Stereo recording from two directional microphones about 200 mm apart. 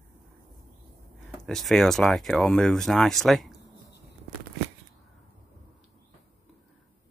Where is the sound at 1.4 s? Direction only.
Centre (ahead or behind).